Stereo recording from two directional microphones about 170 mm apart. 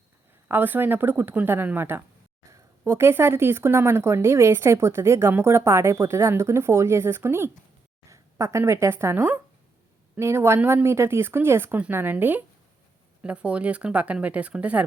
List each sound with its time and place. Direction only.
0.4 s a woman's voice: 10° right (ahead or behind)